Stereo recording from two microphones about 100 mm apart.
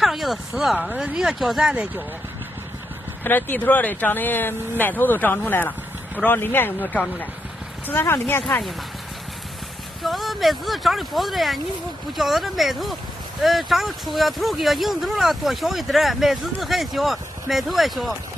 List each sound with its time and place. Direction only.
0.0 s speech: centre (ahead or behind)
3.3 s speech: 20° left (ahead or behind)
10.0 s speech: centre (ahead or behind)